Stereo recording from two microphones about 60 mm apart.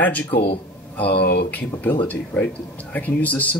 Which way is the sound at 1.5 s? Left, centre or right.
Left.